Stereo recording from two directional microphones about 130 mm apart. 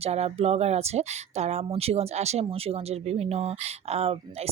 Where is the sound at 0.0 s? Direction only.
55° right (ahead or behind).